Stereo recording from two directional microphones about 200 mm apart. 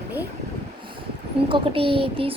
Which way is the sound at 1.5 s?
25° right (ahead or behind).